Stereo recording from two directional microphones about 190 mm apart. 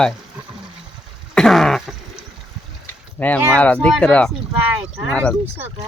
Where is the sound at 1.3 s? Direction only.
Centre (ahead or behind).